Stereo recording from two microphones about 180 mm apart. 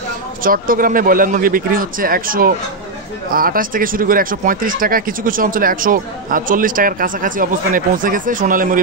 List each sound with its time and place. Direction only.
0.4 s speech: 50° right (ahead or behind)